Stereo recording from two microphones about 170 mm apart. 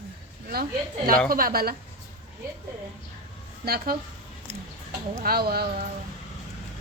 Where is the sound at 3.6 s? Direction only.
60° right (ahead or behind).